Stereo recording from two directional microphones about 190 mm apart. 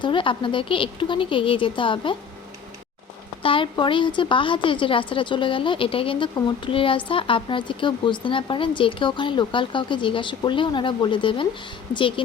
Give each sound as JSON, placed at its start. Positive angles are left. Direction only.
{"t": 0.0, "sound": "a woman's voice", "side_deg": 25}
{"t": 3.4, "sound": "a woman's voice", "side_deg": 25}